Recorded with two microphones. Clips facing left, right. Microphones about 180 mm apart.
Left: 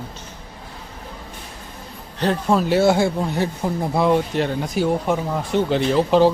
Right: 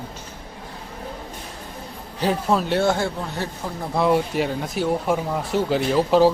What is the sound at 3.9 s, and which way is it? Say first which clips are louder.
Speech: even; 5° right (ahead or behind).